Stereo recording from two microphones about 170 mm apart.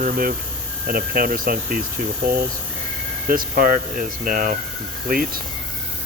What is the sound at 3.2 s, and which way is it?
Speech, 55° right (ahead or behind).